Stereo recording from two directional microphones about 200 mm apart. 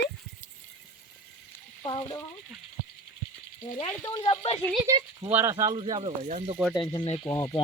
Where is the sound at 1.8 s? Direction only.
20° left (ahead or behind).